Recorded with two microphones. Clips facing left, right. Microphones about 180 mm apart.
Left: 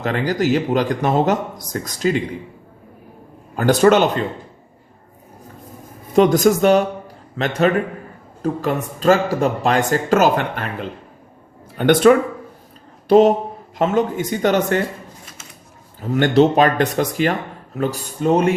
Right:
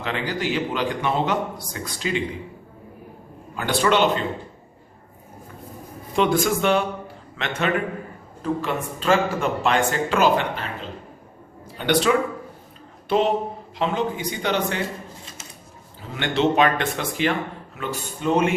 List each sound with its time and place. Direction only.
0.0 s speech: 40° left (ahead or behind)
3.5 s speech: 45° left (ahead or behind)
6.1 s speech: 40° left (ahead or behind)
16.0 s speech: 45° left (ahead or behind)